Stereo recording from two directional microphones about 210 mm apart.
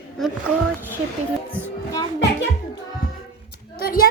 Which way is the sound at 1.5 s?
10° left (ahead or behind).